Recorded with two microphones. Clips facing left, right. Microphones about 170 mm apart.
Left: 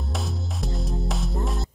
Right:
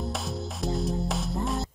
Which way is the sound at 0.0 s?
Centre (ahead or behind).